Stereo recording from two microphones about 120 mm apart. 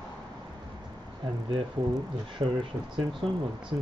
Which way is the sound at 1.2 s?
40° right (ahead or behind).